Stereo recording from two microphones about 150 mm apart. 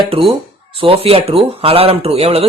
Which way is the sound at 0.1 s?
35° right (ahead or behind).